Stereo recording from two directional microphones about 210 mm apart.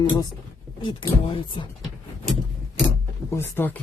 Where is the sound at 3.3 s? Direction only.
10° left (ahead or behind).